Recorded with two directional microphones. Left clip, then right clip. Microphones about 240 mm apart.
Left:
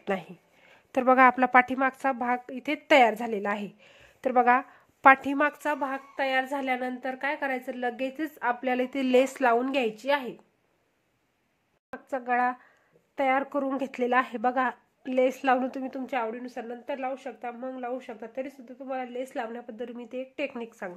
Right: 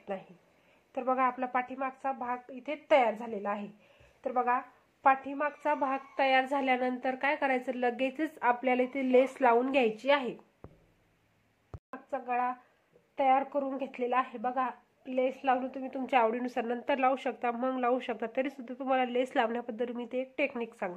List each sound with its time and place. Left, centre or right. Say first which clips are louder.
0.0 s speech: left 8 dB; left
5.6 s a woman's voice: left 1 dB; centre
12.1 s speech: left 5 dB; left
13.1 s speech: left 1 dB; left
16.1 s a woman's voice: right 6 dB; centre